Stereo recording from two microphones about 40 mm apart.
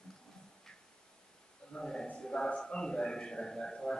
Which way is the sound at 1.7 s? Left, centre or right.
Centre.